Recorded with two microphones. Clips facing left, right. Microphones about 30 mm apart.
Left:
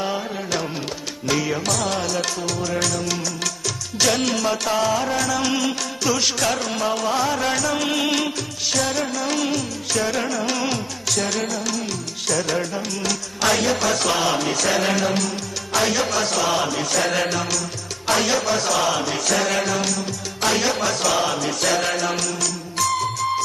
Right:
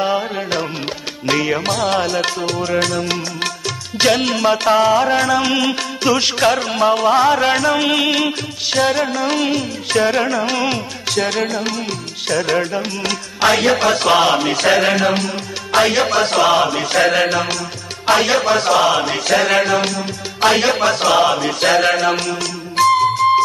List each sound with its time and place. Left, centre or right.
0.0 s music: right